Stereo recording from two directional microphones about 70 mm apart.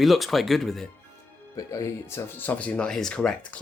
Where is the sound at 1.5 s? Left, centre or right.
Left.